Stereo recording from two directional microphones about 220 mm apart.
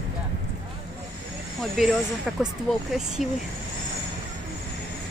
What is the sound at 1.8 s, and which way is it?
Speech, centre (ahead or behind).